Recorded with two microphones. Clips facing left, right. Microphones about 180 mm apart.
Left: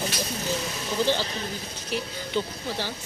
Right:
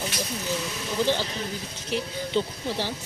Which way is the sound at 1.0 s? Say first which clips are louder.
Even; 20° right (ahead or behind).